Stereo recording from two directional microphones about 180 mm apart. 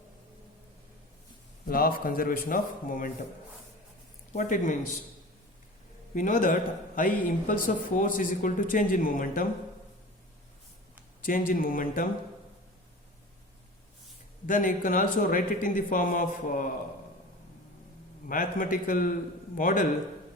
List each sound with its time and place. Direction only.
1.6 s speech: 55° left (ahead or behind)
4.3 s speech: 45° left (ahead or behind)
6.1 s speech: 50° left (ahead or behind)
11.3 s speech: 50° left (ahead or behind)
14.4 s speech: 50° left (ahead or behind)
18.3 s speech: 50° left (ahead or behind)